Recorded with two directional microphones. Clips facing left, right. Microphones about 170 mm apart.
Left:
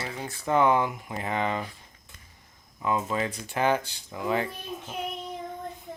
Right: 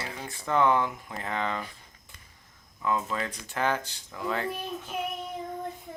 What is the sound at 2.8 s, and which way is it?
Speech, 15° left (ahead or behind).